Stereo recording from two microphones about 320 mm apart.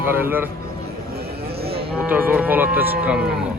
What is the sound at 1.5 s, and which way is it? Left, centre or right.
Cattle, right.